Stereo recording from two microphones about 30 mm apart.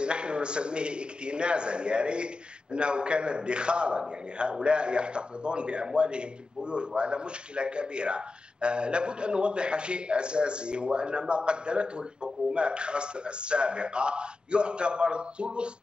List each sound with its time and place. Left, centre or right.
0.0 s speech: right